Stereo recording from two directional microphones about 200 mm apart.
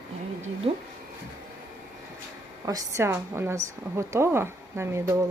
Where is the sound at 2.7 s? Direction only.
15° right (ahead or behind).